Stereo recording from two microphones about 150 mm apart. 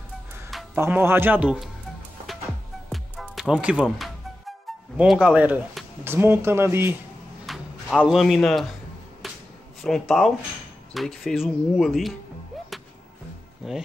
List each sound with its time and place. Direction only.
0.7 s a man's voice: 15° right (ahead or behind)
2.9 s music: centre (ahead or behind)
4.9 s a man's voice: 5° right (ahead or behind)
7.4 s speech: centre (ahead or behind)
9.2 s finger snapping: centre (ahead or behind)
9.8 s speech: centre (ahead or behind)
13.6 s speech: centre (ahead or behind)